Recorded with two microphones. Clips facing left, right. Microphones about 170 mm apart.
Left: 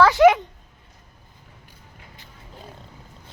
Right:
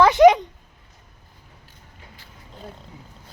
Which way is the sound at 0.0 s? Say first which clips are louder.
Right 2 dB; 20° right (ahead or behind).